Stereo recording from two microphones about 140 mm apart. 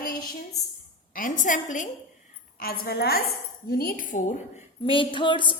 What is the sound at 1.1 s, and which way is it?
Speech, 75° left (ahead or behind).